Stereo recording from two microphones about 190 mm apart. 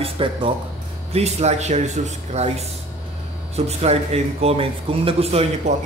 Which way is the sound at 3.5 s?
35° right (ahead or behind).